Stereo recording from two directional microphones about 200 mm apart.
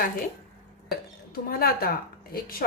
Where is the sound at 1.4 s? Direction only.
45° left (ahead or behind).